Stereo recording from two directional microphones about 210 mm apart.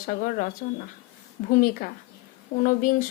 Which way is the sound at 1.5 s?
40° left (ahead or behind).